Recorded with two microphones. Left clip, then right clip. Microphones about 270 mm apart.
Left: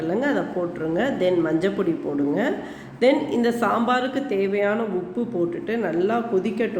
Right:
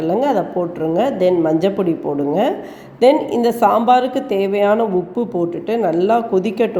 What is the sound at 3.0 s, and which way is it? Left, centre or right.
Speech, centre.